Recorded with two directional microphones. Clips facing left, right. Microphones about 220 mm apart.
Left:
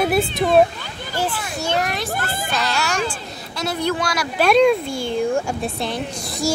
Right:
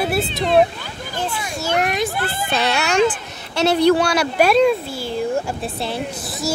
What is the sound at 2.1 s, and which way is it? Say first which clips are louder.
Speech: right 2 dB; 45° left (ahead or behind).